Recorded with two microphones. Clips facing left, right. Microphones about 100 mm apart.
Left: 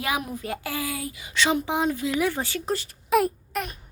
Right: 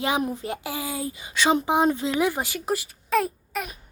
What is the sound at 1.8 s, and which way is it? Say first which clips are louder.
Speech: right 2 dB; 25° right (ahead or behind).